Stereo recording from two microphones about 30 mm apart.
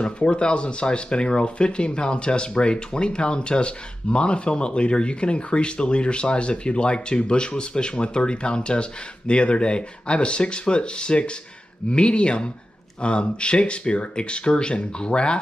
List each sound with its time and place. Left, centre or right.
0.0 s speech: left